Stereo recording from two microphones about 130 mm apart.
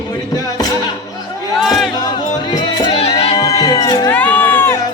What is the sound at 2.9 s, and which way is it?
Music, 55° left (ahead or behind).